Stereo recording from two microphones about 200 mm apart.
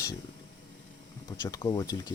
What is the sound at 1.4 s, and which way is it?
Speech, 20° left (ahead or behind).